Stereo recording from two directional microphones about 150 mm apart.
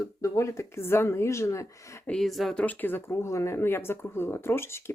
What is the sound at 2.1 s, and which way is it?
Speech, centre (ahead or behind).